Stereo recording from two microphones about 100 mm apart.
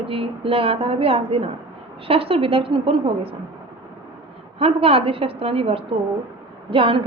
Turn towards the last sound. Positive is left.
turn(degrees=-65)  # may be behind; listen again after turning